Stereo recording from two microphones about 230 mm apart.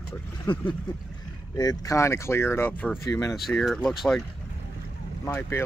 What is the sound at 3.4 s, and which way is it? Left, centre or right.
Speech, centre.